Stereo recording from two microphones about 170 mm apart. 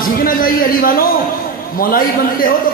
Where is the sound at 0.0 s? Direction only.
55° left (ahead or behind).